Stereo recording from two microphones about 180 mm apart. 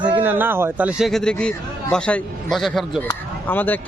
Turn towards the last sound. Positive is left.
turn(degrees=10)  # may be behind; listen again after turning